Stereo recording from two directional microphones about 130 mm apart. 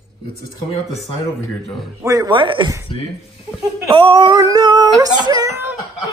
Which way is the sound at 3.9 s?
45° right (ahead or behind).